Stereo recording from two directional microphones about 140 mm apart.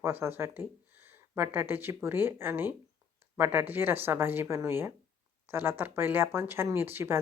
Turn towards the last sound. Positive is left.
turn(degrees=-15)  # may be behind; listen again after turning